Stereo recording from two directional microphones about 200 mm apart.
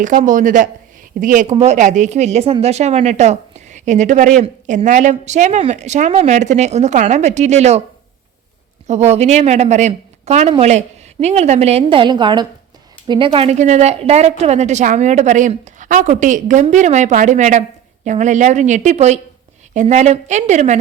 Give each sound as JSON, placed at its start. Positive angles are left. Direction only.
{"t": 0.0, "sound": "a woman's voice", "side_deg": -40}
{"t": 8.9, "sound": "a woman's voice", "side_deg": -35}